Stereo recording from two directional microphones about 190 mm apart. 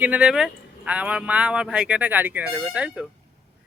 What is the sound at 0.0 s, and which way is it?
Speech, 5° right (ahead or behind).